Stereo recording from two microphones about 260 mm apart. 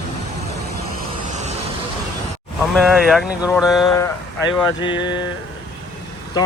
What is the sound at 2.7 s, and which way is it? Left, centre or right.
Speech, centre.